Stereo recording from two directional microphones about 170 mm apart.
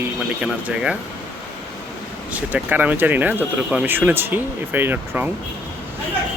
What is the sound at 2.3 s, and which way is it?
Speech, 10° right (ahead or behind).